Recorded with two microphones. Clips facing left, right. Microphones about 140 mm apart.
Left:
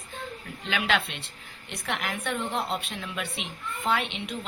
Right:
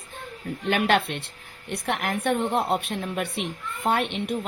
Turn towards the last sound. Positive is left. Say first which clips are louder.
# right 4 dB
turn(degrees=-55)  # may be behind; listen again after turning